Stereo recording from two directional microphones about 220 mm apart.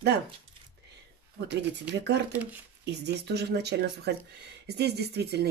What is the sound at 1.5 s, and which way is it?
Speech, 50° right (ahead or behind).